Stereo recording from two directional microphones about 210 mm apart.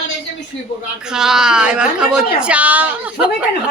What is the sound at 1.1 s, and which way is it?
A woman's voice, 5° right (ahead or behind).